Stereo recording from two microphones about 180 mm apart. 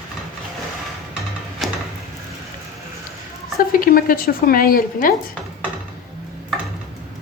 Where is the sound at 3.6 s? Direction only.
50° left (ahead or behind).